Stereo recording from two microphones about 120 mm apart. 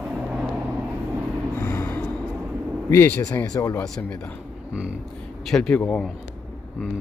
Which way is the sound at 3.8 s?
10° left (ahead or behind).